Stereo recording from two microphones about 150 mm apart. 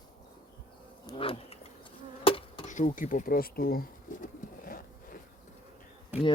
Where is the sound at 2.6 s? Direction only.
55° left (ahead or behind).